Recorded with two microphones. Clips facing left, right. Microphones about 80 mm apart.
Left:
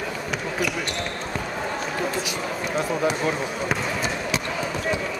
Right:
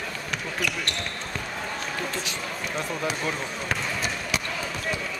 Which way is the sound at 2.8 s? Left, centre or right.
Centre.